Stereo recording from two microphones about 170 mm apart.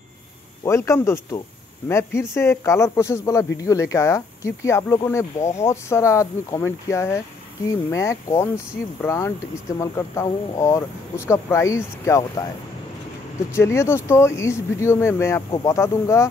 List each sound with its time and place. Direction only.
0.7 s speech: 15° left (ahead or behind)
13.6 s speech: 15° left (ahead or behind)